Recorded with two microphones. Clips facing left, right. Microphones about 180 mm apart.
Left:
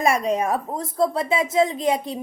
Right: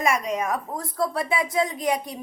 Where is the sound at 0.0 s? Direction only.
30° left (ahead or behind).